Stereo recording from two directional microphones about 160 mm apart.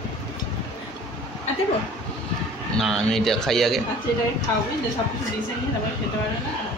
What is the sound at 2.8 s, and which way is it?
A man's voice, centre (ahead or behind).